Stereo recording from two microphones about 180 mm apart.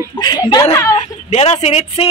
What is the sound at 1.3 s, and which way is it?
Speech, 35° left (ahead or behind).